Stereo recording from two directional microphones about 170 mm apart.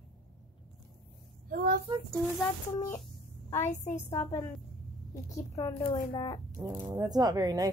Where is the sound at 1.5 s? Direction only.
60° right (ahead or behind).